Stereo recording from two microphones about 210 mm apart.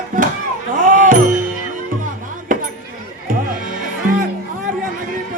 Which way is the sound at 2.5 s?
40° right (ahead or behind).